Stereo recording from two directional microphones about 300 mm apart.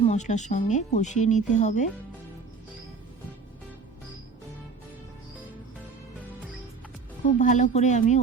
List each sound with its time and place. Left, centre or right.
0.1 s speech: left
7.3 s speech: left